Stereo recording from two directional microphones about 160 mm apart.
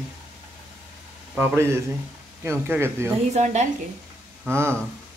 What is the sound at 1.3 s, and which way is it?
A man's voice, 15° right (ahead or behind).